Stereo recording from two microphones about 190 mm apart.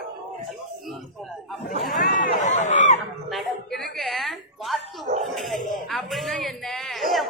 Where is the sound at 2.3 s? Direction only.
40° left (ahead or behind).